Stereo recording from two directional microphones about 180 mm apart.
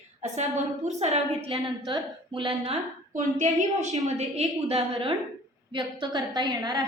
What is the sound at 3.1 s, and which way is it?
A woman's voice, 45° right (ahead or behind).